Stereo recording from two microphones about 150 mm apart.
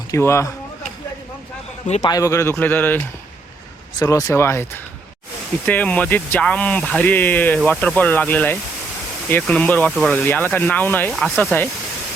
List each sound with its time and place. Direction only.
0.1 s speech: 20° left (ahead or behind)
2.0 s speech: 25° left (ahead or behind)
4.0 s speech: 20° left (ahead or behind)
11.1 s speech: centre (ahead or behind)